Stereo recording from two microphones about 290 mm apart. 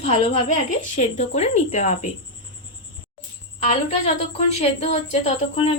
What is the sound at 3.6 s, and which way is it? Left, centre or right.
A woman's voice, left.